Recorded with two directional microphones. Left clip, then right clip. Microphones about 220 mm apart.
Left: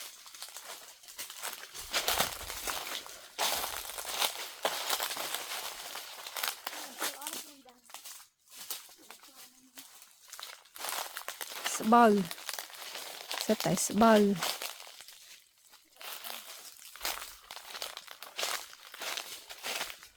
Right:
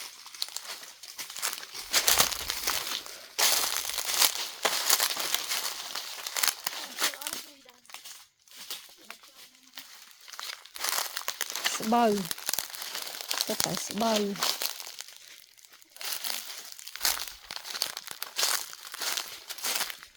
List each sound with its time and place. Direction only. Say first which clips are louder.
0.3 s crumpling: right 10 dB; 50° right (ahead or behind)
1.9 s a sound: right 6 dB; 50° right (ahead or behind)
8.7 s a sound: right 3 dB; 5° right (ahead or behind)
10.3 s crumpling: right 7 dB; 50° right (ahead or behind)
11.9 s speech: left 2 dB; 25° left (ahead or behind)
12.1 s crumpling: right 1 dB; 55° right (ahead or behind)
13.8 s speech: left 6 dB; 40° left (ahead or behind)
14.3 s crumpling: right 5 dB; 50° right (ahead or behind)